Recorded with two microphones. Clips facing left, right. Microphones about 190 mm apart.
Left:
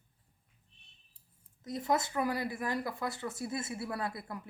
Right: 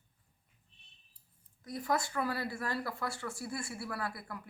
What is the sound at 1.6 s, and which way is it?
Speech, 20° left (ahead or behind).